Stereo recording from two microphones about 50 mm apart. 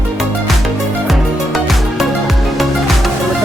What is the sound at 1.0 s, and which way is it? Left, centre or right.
Music, centre.